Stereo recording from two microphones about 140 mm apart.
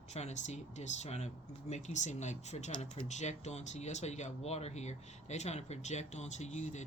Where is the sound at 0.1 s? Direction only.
50° left (ahead or behind).